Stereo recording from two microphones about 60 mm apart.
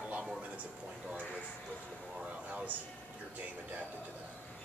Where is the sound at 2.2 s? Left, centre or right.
Right.